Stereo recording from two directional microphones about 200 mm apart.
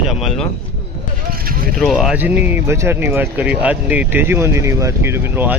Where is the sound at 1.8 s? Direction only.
Centre (ahead or behind).